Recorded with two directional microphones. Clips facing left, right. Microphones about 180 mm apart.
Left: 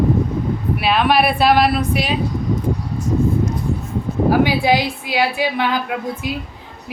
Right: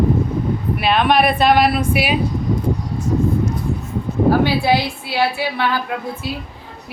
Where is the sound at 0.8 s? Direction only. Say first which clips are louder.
Right 1 dB; 5° left (ahead or behind).